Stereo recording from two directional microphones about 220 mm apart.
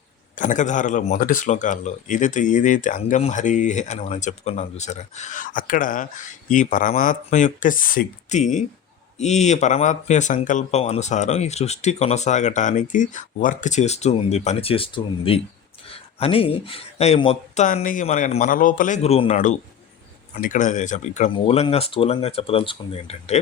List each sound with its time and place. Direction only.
0.3 s speech: 35° left (ahead or behind)